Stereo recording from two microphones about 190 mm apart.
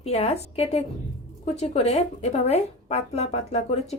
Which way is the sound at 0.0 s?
35° left (ahead or behind).